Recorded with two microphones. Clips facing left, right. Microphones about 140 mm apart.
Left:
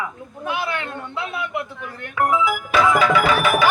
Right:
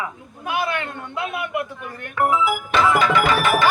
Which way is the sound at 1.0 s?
15° right (ahead or behind).